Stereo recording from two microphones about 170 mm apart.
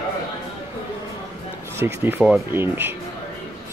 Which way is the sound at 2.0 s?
5° right (ahead or behind).